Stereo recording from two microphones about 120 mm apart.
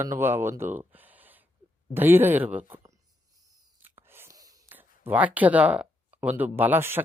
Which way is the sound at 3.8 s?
20° right (ahead or behind).